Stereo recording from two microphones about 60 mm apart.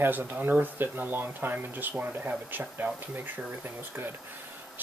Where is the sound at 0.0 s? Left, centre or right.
Right.